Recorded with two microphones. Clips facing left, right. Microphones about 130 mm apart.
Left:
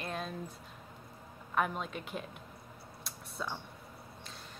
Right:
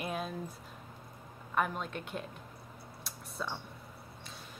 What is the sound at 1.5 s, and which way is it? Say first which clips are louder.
Speech: even; centre (ahead or behind).